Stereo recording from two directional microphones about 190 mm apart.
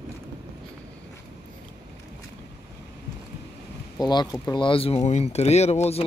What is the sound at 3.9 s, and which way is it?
Speech, 20° left (ahead or behind).